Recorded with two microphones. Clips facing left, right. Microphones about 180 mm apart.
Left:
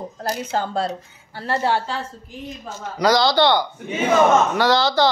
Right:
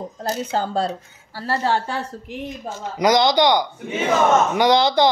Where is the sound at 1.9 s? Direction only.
70° right (ahead or behind).